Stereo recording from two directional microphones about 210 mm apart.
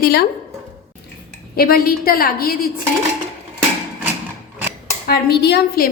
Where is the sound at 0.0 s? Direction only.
45° left (ahead or behind).